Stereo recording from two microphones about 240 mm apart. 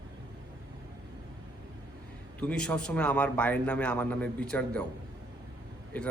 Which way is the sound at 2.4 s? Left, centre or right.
Centre.